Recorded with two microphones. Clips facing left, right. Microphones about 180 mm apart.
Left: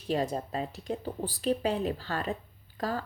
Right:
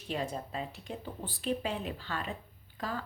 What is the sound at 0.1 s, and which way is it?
Speech, 40° left (ahead or behind).